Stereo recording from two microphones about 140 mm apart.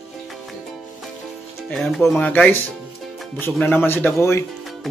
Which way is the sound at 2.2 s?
10° left (ahead or behind).